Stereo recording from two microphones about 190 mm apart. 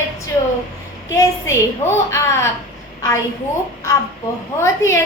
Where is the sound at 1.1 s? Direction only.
15° left (ahead or behind).